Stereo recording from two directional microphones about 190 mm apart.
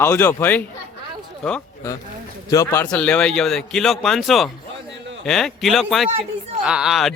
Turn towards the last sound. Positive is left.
turn(degrees=0)  # may be behind; listen again after turning